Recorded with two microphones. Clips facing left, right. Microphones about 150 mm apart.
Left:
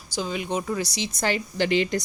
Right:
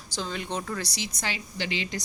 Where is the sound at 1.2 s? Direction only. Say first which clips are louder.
Left 10 dB; 50° left (ahead or behind).